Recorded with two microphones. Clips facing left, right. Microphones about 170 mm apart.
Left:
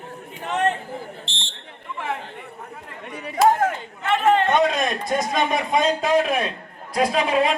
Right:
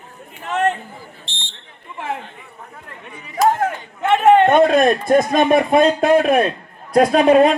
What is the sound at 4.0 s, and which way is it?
A man's voice, 55° right (ahead or behind).